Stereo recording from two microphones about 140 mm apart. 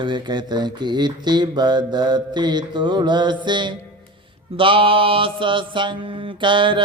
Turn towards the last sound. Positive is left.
turn(degrees=-35)  # may be behind; listen again after turning